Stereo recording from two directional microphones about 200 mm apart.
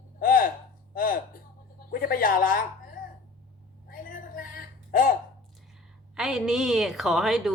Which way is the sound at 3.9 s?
45° left (ahead or behind).